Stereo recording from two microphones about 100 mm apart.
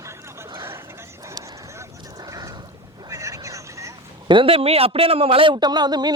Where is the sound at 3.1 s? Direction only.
35° right (ahead or behind).